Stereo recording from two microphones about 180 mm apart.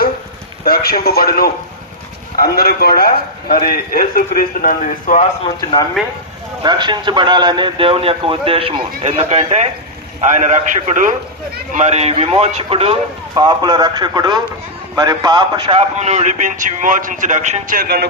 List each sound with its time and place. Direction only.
0.6 s a man's voice: 55° left (ahead or behind)
6.0 s speech: centre (ahead or behind)
6.6 s a man's voice: 25° right (ahead or behind); by 18.0 s 55° right (ahead or behind)